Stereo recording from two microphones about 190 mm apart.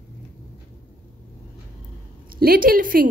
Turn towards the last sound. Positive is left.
turn(degrees=-50)  # may be behind; listen again after turning